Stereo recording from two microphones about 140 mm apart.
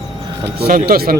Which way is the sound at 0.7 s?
85° right.